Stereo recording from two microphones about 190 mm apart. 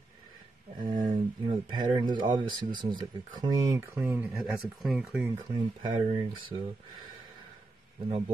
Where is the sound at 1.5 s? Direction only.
20° right (ahead or behind).